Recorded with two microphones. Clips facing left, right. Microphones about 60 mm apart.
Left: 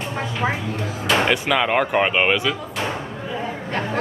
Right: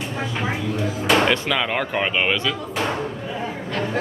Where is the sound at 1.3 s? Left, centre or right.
Centre.